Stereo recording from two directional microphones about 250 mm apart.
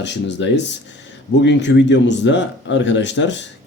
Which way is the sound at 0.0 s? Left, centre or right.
Left.